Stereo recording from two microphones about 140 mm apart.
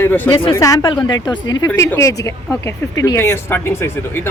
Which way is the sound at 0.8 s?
35° left (ahead or behind).